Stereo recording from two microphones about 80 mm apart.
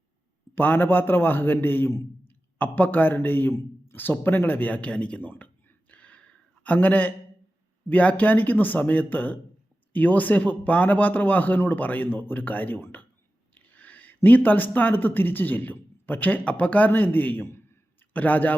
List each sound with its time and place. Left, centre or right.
0.5 s a man's voice: left
2.6 s a man's voice: left
5.9 s a sound: centre
7.9 s a man's voice: centre